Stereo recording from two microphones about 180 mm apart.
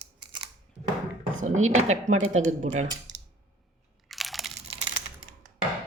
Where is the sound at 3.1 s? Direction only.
90° right.